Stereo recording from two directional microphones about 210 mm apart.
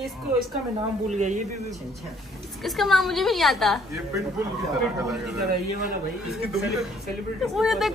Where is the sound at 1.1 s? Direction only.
35° right (ahead or behind).